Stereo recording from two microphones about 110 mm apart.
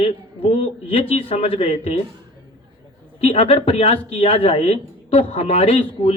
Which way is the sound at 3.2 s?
70° left (ahead or behind).